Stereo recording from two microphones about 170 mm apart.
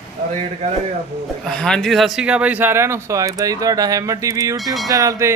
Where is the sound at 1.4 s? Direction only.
5° left (ahead or behind).